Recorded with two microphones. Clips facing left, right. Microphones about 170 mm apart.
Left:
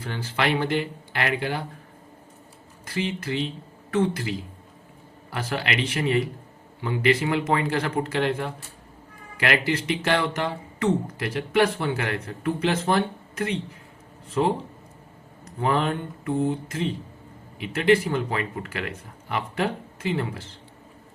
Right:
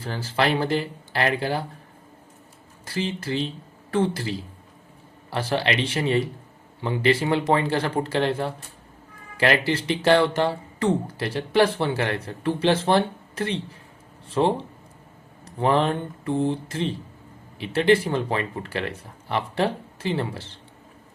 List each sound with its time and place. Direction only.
0.0 s speech: 35° right (ahead or behind)
2.8 s speech: 30° right (ahead or behind)
15.6 s speech: 30° right (ahead or behind)